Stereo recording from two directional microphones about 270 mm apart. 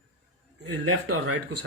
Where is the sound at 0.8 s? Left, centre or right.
Right.